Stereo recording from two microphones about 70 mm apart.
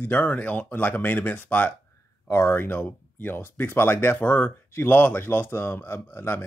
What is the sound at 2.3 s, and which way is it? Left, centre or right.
A man's voice, left.